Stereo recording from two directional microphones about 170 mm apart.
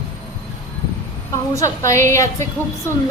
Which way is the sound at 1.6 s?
15° left (ahead or behind).